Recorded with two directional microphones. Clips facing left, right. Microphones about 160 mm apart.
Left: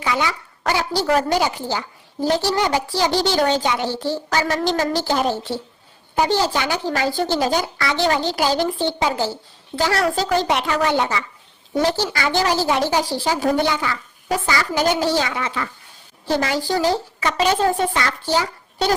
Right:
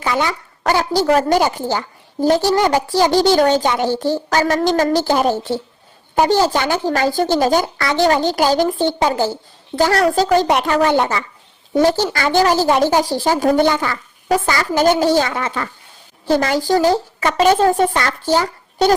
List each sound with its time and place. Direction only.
0.0 s a woman's voice: 50° right (ahead or behind)